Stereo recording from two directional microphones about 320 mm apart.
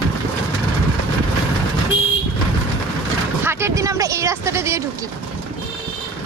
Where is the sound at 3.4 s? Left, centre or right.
Centre.